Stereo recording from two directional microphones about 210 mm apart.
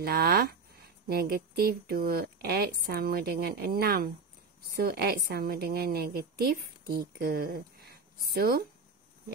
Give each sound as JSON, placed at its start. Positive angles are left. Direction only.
{"t": 0.0, "sound": "speech", "side_deg": -45}